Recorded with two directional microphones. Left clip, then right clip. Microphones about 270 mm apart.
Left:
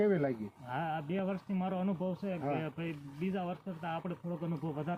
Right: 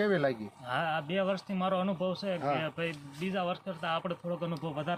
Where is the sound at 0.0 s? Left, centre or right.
Centre.